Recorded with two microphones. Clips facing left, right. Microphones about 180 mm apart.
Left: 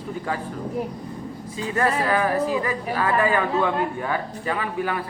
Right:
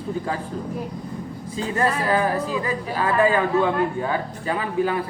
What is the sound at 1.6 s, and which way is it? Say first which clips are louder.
Speech: even; 25° right (ahead or behind).